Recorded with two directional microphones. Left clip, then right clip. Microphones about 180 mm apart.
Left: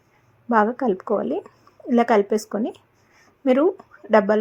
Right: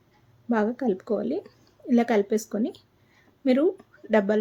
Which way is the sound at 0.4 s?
15° right (ahead or behind).